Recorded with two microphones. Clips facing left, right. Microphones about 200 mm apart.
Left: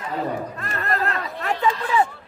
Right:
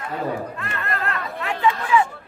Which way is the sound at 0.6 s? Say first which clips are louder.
Left 2 dB; 40° left (ahead or behind).